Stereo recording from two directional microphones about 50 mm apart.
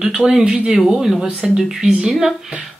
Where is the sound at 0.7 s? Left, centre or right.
Centre.